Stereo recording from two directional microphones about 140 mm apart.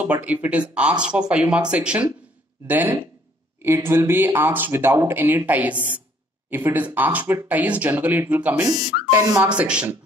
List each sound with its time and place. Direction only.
0.0 s speech: 10° right (ahead or behind)
9.1 s speech: 25° right (ahead or behind)
9.4 s speech: 10° right (ahead or behind)